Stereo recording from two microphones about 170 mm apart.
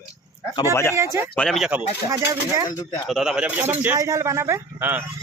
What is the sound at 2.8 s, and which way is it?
Speech, 20° left (ahead or behind).